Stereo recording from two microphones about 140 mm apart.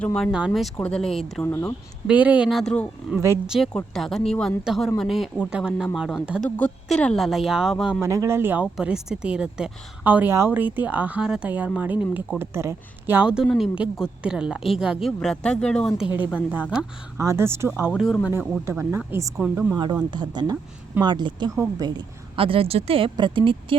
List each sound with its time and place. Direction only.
0.0 s a woman's voice: 5° left (ahead or behind)
0.8 s speech: 5° left (ahead or behind)
1.4 s speech: 15° left (ahead or behind)
2.0 s a woman's voice: 10° right (ahead or behind)
6.6 s a woman's voice: 5° left (ahead or behind)
8.0 s speech: 20° right (ahead or behind)
8.6 s a woman's voice: 5° right (ahead or behind)
16.0 s a woman's voice: 10° right (ahead or behind)
18.0 s a woman's voice: 5° left (ahead or behind)
18.6 s a woman's voice: 15° right (ahead or behind)
19.7 s a woman's voice: 30° right (ahead or behind)